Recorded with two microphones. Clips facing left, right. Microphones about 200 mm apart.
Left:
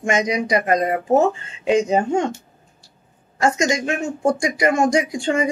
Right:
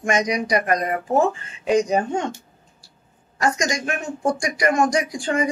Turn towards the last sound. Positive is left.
turn(degrees=25)  # may be behind; listen again after turning